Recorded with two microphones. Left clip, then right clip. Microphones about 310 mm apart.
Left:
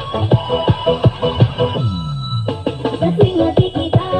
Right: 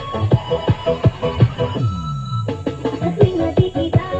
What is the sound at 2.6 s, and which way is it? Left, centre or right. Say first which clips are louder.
Music: left 5 dB; left.